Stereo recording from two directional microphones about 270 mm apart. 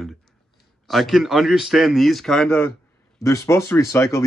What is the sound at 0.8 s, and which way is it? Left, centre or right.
Speech, centre.